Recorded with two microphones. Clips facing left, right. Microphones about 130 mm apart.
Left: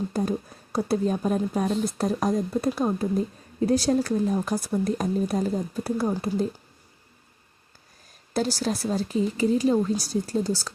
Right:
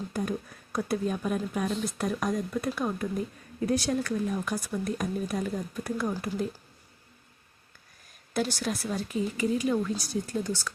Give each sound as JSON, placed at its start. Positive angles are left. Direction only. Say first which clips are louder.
{"t": 0.1, "sound": "a woman's voice", "louder": "left 5 dB", "side_deg": 30}
{"t": 8.3, "sound": "a woman's voice", "louder": "left 4 dB", "side_deg": 35}